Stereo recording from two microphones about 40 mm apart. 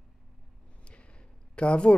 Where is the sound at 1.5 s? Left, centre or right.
Left.